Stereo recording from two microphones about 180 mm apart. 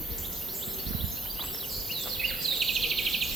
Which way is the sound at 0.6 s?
Centre (ahead or behind).